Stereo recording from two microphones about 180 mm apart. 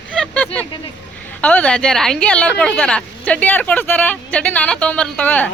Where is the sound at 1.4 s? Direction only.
5° left (ahead or behind).